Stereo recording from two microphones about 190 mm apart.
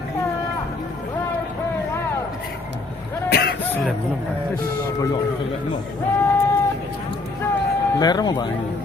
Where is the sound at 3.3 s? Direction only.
55° left (ahead or behind).